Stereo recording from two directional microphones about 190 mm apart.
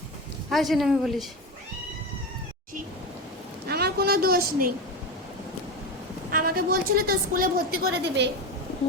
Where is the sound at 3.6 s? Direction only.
55° right (ahead or behind).